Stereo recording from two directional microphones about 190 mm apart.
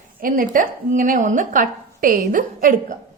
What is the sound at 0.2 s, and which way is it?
A woman's voice, 45° right (ahead or behind).